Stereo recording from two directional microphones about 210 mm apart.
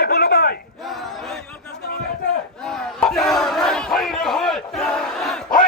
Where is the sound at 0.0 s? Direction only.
50° left (ahead or behind).